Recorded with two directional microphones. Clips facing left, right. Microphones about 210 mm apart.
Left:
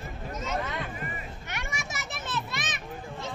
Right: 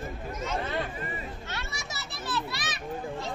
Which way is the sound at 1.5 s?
15° left (ahead or behind).